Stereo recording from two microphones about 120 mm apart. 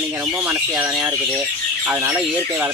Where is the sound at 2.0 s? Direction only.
15° right (ahead or behind).